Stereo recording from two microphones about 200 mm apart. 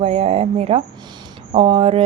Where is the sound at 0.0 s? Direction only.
30° right (ahead or behind).